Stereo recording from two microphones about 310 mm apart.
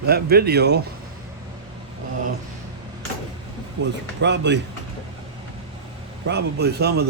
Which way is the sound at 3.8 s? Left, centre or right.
Right.